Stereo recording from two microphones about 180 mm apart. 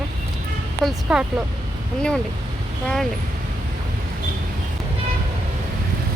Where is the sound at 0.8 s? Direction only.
5° right (ahead or behind).